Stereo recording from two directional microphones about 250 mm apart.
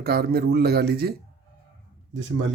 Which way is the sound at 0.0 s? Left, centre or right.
Right.